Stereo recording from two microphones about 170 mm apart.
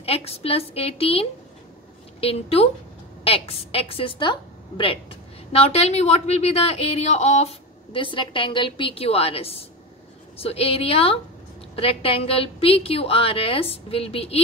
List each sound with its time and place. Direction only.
0.0 s a woman's voice: 35° left (ahead or behind)